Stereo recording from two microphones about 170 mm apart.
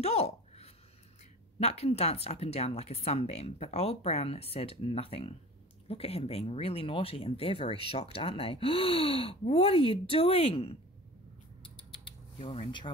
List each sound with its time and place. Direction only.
0.0 s a sound: 40° left (ahead or behind)
1.6 s speech: 40° left (ahead or behind)
12.4 s speech: 30° left (ahead or behind)